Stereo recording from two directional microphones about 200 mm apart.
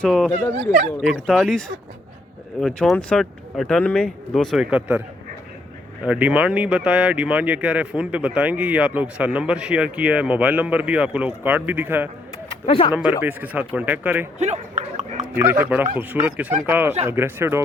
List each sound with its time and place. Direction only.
0.0 s speech: 5° left (ahead or behind)
6.1 s speech: 5° right (ahead or behind)
12.6 s speech: 25° left (ahead or behind)
13.2 s speech: 10° right (ahead or behind)
14.3 s speech: 35° right (ahead or behind)
15.4 s speech: 15° right (ahead or behind)